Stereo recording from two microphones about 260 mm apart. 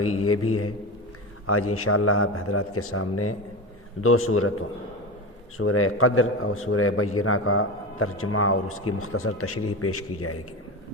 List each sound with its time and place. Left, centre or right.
0.0 s a man's voice: left